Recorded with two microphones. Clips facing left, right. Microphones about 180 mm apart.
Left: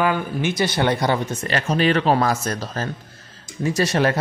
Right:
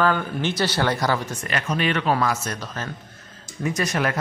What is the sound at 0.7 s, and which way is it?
Speech, 20° left (ahead or behind).